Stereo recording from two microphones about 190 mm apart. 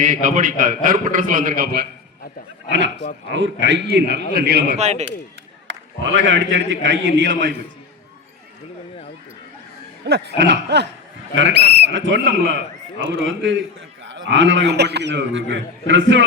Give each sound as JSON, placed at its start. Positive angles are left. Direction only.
{"t": 0.0, "sound": "a man's voice", "side_deg": -45}
{"t": 2.6, "sound": "a man's voice", "side_deg": -70}
{"t": 4.8, "sound": "speech", "side_deg": -35}
{"t": 6.2, "sound": "a man's voice", "side_deg": -75}
{"t": 10.0, "sound": "a man's voice", "side_deg": -65}
{"t": 11.3, "sound": "a man's voice", "side_deg": -75}
{"t": 13.0, "sound": "a man's voice", "side_deg": -90}